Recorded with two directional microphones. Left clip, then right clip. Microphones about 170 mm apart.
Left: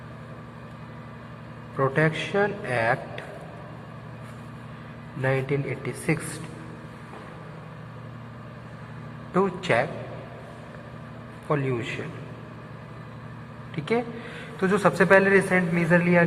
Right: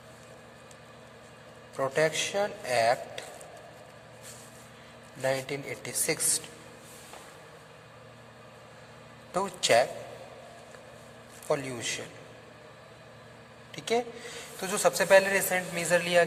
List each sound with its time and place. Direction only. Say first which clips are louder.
1.8 s speech: left 3 dB; 60° right (ahead or behind)
5.2 s a man's voice: left 4 dB; 70° right (ahead or behind)
9.3 s a man's voice: left 1 dB; 90° right
11.4 s a man's voice: left 3 dB; 75° right (ahead or behind)
13.7 s a man's voice: left 3 dB; 60° right (ahead or behind); by 16.2 s 90° right